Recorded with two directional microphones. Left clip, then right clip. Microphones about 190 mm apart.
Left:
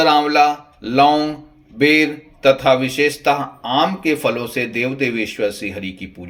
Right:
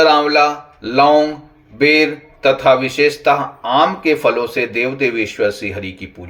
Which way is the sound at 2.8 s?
35° left (ahead or behind).